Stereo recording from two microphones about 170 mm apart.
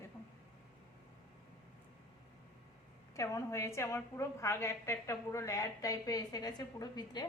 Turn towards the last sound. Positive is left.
turn(degrees=25)  # may be behind; listen again after turning